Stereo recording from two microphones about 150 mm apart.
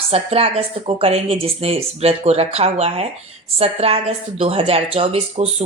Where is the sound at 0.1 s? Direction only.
40° right (ahead or behind).